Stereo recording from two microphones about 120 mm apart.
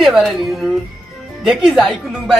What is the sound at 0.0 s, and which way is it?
A man's voice, centre (ahead or behind).